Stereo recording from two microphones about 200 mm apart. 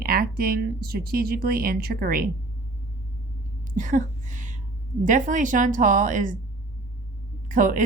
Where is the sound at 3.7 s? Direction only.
40° right (ahead or behind).